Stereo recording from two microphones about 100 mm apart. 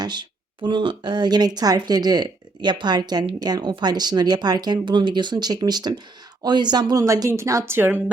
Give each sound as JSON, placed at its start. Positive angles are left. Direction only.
{"t": 0.0, "sound": "a woman's voice", "side_deg": -50}
{"t": 7.0, "sound": "a woman's voice", "side_deg": -30}